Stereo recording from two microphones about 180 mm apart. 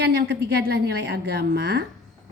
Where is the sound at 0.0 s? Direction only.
65° right (ahead or behind).